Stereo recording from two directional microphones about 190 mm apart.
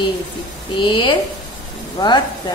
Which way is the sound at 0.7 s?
25° left (ahead or behind).